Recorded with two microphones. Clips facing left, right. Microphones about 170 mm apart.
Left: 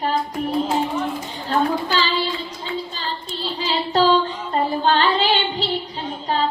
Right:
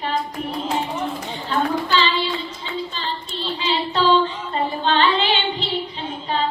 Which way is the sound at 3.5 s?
40° left (ahead or behind).